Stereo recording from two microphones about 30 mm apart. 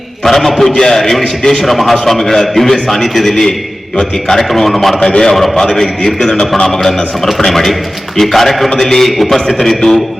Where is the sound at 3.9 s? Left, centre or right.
Left.